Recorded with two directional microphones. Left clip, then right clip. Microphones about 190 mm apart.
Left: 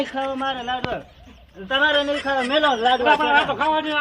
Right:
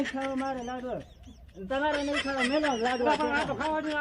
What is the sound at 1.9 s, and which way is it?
A man's voice, centre (ahead or behind).